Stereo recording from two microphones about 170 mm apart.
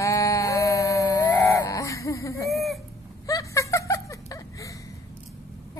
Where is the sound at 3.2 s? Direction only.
20° left (ahead or behind).